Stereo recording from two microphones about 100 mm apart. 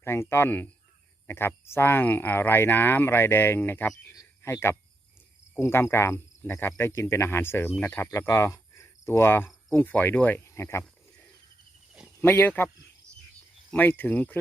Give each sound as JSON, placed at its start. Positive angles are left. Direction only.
{"t": 0.0, "sound": "speech", "side_deg": 25}
{"t": 4.1, "sound": "a sound", "side_deg": 30}
{"t": 5.5, "sound": "speech", "side_deg": 25}
{"t": 8.2, "sound": "cricket", "side_deg": 30}
{"t": 9.7, "sound": "speech", "side_deg": 15}
{"t": 12.2, "sound": "speech", "side_deg": 20}